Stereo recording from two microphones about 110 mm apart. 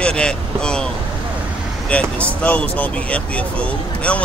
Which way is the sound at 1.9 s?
10° left (ahead or behind).